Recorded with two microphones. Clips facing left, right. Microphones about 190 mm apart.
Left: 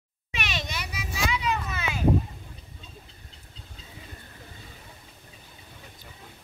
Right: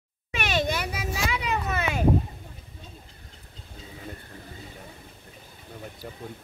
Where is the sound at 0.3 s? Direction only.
50° right (ahead or behind).